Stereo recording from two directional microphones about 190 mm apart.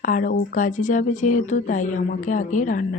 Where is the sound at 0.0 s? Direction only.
45° left (ahead or behind).